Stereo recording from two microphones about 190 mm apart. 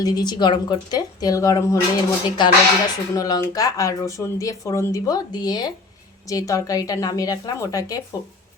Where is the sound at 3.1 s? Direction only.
20° left (ahead or behind).